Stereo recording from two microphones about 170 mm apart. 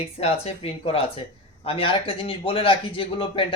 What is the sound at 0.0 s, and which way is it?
A man's voice, 35° left (ahead or behind).